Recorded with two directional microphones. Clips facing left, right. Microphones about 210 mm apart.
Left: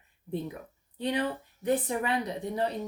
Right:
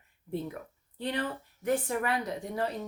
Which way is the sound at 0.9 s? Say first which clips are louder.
Left 3 dB; 15° left (ahead or behind).